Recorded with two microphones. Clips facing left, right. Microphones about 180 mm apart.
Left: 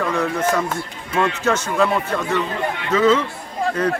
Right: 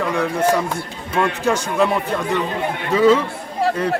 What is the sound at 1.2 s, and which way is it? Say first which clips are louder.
Speech: right 1 dB; 10° right (ahead or behind).